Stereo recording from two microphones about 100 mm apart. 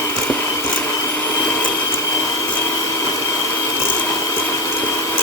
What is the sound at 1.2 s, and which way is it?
Vacuum cleaner, 15° left (ahead or behind).